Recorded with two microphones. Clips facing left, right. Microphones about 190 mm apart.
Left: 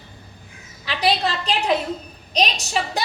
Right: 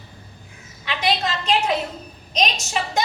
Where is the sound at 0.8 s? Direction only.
35° left (ahead or behind).